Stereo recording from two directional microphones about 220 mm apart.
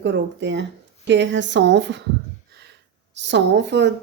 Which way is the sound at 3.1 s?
55° right (ahead or behind).